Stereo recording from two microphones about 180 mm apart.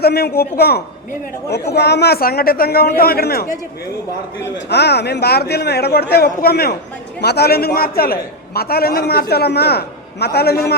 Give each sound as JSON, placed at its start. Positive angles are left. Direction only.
{"t": 0.0, "sound": "speech", "side_deg": 60}
{"t": 4.7, "sound": "speech", "side_deg": 65}